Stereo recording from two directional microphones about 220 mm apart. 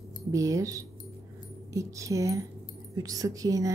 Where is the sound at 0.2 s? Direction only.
15° right (ahead or behind).